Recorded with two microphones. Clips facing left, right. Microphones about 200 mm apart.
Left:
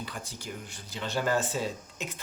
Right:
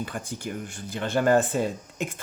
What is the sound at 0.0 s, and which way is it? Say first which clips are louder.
Speech: right 7 dB; 50° right (ahead or behind).